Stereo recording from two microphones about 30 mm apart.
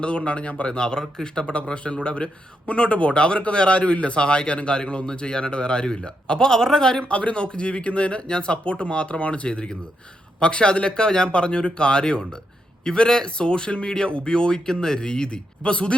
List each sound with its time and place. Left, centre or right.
0.0 s a man's voice: left
0.7 s speech: left
1.5 s a man's voice: left
6.5 s speech: centre
7.0 s a man's voice: left